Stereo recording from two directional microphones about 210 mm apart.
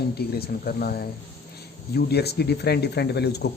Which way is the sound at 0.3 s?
45° left (ahead or behind).